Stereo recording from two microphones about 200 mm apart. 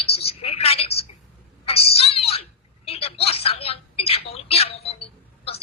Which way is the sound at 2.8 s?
30° left (ahead or behind).